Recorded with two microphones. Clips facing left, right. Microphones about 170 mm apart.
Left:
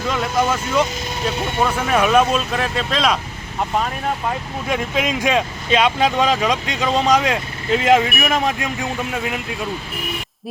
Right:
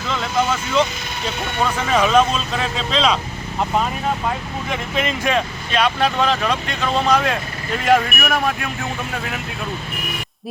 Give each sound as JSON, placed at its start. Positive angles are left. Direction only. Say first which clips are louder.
{"t": 0.1, "sound": "speech", "louder": "left 1 dB", "side_deg": 10}
{"t": 4.7, "sound": "speech", "louder": "left 3 dB", "side_deg": 10}
{"t": 9.1, "sound": "speech", "louder": "left 3 dB", "side_deg": 5}